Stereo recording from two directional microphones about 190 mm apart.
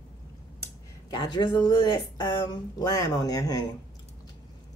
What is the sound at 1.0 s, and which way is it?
Speech, 20° left (ahead or behind).